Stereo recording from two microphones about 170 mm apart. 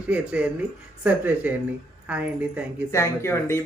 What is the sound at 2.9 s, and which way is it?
Speech, 15° left (ahead or behind).